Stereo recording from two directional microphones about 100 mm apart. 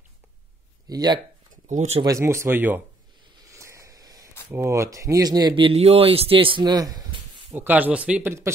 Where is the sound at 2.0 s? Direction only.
30° right (ahead or behind).